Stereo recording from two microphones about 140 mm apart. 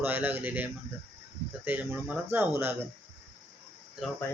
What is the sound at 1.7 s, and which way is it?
Speech, 10° right (ahead or behind).